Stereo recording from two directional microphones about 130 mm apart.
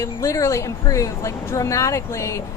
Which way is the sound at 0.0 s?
25° left (ahead or behind).